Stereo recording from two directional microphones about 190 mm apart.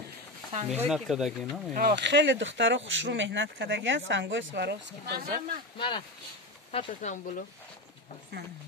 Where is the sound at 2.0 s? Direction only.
70° right (ahead or behind).